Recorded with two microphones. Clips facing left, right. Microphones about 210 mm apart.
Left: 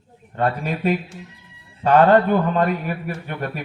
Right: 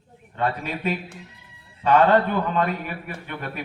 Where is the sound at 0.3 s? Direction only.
45° left (ahead or behind).